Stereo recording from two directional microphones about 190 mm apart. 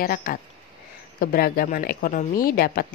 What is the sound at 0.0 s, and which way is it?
A woman's voice, 50° left (ahead or behind).